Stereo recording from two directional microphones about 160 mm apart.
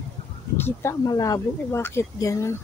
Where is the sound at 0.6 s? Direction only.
15° left (ahead or behind).